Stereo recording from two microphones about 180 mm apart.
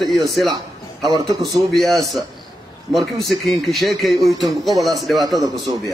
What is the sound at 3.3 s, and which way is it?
A man's voice, centre (ahead or behind).